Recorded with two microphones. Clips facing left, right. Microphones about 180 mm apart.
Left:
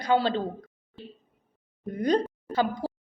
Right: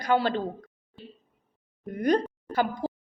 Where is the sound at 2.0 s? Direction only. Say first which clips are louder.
Even; 20° left (ahead or behind).